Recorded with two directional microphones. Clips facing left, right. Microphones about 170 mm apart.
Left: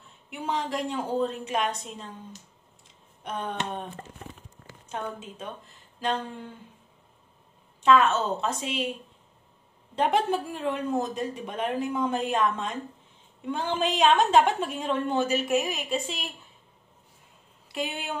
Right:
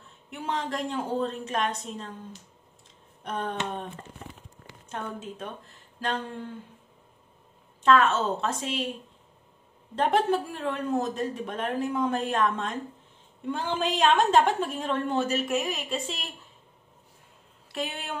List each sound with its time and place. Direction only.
0.3 s a woman's voice: 5° left (ahead or behind)
3.3 s a woman's voice: centre (ahead or behind)
7.8 s a woman's voice: 5° left (ahead or behind)
9.9 s a woman's voice: 5° left (ahead or behind)
17.7 s speech: 5° left (ahead or behind)